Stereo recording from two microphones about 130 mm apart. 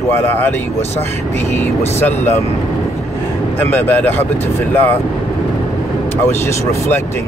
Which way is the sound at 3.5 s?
15° left (ahead or behind).